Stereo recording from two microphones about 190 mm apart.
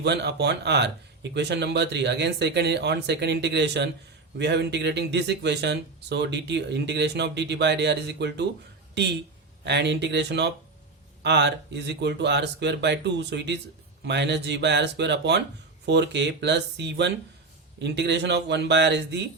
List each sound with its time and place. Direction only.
0.0 s speech: 65° right (ahead or behind)
9.6 s speech: 65° right (ahead or behind)